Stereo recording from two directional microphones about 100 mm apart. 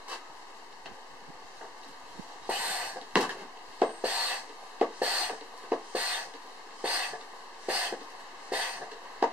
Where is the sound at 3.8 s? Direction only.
15° right (ahead or behind).